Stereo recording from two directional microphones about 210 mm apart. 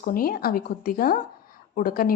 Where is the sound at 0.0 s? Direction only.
45° left (ahead or behind).